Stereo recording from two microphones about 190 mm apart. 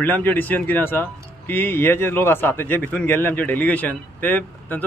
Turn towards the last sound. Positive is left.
turn(degrees=10)  # may be behind; listen again after turning